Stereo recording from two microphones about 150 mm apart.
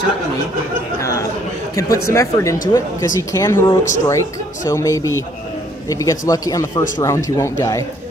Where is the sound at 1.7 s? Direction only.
20° left (ahead or behind).